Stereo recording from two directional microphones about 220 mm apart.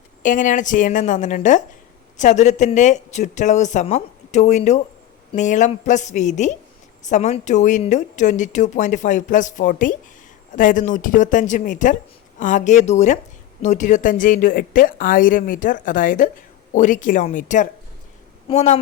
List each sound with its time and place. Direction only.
0.2 s a woman's voice: 35° left (ahead or behind)